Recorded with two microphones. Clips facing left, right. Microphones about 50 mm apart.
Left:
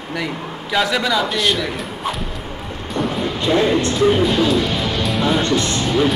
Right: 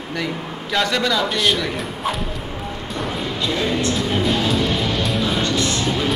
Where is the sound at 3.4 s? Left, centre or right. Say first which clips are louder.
Left 6 dB; left.